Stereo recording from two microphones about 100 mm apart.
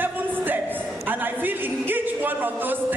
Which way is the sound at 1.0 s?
20° right (ahead or behind).